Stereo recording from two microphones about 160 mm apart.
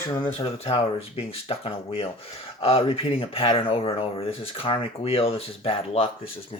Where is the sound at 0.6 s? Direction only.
40° left (ahead or behind).